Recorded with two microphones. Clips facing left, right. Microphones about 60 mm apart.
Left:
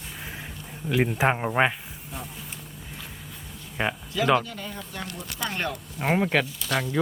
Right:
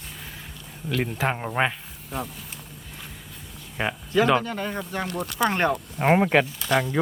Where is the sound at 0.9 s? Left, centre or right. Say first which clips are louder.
Left 3 dB; centre.